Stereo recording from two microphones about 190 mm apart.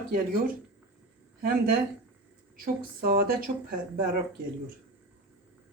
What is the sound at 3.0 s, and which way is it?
Speech, 50° right (ahead or behind).